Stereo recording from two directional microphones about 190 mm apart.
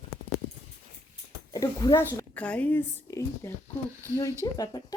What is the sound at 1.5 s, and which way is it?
Speech, 20° left (ahead or behind).